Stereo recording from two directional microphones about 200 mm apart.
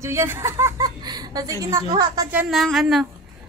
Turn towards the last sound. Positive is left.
turn(degrees=0)  # may be behind; listen again after turning